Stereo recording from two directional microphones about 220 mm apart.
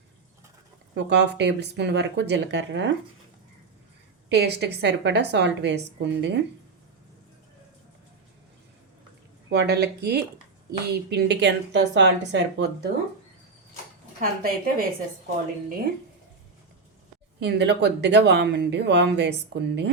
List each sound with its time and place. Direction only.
0.9 s speech: 50° right (ahead or behind)
4.3 s speech: 50° right (ahead or behind)
9.5 s speech: 50° right (ahead or behind)
14.2 s a woman's voice: 40° right (ahead or behind)
17.4 s speech: 50° right (ahead or behind)